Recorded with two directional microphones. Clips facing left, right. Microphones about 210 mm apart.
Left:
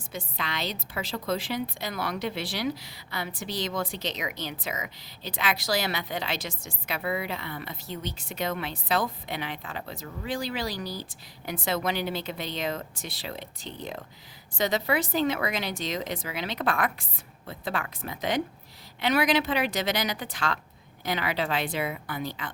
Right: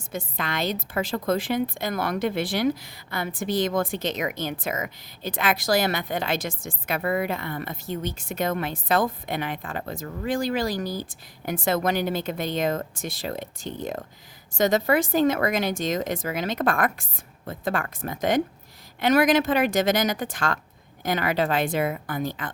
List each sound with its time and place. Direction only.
0.1 s a woman's voice: 50° right (ahead or behind)